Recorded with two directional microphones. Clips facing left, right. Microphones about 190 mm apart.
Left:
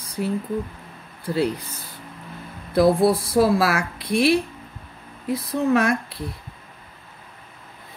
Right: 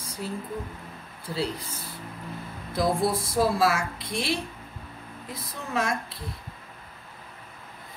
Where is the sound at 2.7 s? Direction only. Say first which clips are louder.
Left 8 dB; 65° left (ahead or behind).